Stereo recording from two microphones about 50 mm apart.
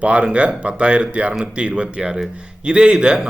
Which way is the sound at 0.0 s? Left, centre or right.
Right.